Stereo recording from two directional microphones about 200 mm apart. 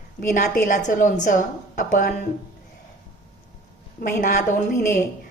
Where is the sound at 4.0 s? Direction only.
40° left (ahead or behind).